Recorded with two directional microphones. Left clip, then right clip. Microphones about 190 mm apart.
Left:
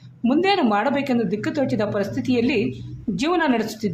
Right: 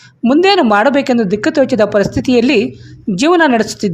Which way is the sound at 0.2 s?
40° right (ahead or behind).